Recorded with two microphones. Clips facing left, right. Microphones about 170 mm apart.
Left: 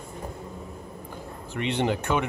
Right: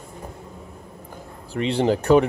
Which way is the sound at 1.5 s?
35° right (ahead or behind).